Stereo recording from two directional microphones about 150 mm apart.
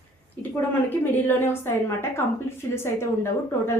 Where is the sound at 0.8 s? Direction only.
15° left (ahead or behind).